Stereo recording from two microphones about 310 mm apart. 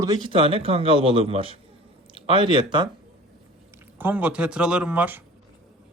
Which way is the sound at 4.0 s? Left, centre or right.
Centre.